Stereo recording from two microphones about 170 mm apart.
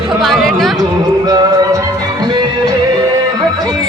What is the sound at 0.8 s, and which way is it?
Music, 25° right (ahead or behind).